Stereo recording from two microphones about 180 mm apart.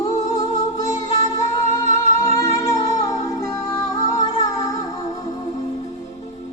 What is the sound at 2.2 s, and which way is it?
Music, 15° left (ahead or behind).